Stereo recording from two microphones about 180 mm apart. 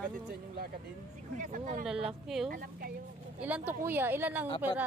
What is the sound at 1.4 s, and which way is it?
Speech, 45° right (ahead or behind).